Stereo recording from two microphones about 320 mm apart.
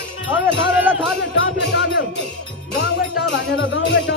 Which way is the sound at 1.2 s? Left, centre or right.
Left.